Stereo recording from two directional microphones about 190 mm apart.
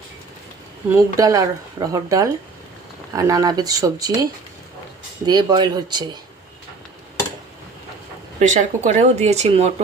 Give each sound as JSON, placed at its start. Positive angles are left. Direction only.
{"t": 1.2, "sound": "speech", "side_deg": -15}
{"t": 8.4, "sound": "speech", "side_deg": -40}